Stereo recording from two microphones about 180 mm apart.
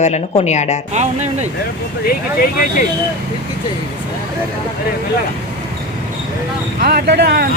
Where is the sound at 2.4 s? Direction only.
50° left (ahead or behind).